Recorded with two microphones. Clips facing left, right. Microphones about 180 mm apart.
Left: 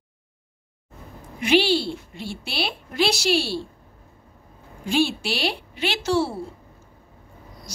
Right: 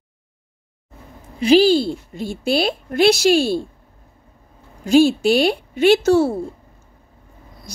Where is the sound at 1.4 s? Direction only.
40° right (ahead or behind).